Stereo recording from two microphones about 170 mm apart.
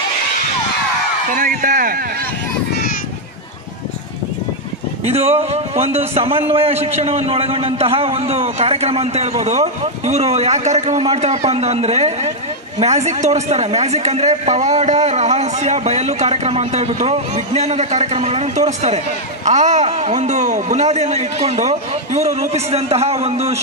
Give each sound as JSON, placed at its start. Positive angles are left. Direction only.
{"t": 1.3, "sound": "a man's voice", "side_deg": -50}
{"t": 5.0, "sound": "a man's voice", "side_deg": -35}